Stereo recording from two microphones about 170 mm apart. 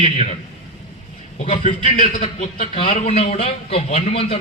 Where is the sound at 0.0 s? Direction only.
40° left (ahead or behind).